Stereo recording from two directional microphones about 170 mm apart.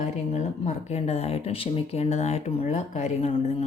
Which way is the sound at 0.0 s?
45° left (ahead or behind).